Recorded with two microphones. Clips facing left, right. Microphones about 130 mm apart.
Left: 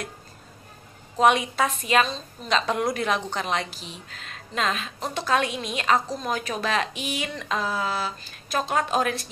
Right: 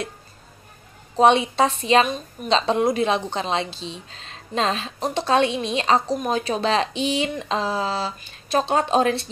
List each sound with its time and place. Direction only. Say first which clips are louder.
1.1 s a woman's voice: right 4 dB; 25° right (ahead or behind)
2.0 s a woman's voice: right 5 dB; 20° right (ahead or behind)